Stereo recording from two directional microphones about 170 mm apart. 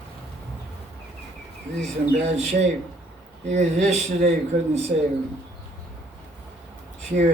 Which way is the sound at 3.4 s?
45° right (ahead or behind).